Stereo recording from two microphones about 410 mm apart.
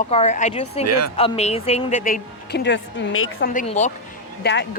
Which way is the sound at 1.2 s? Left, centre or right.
Centre.